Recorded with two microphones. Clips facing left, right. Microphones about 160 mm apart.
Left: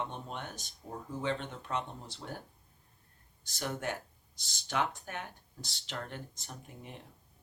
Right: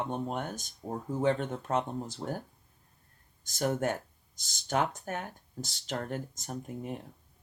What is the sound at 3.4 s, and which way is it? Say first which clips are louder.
Speech: right 8 dB; 45° right (ahead or behind).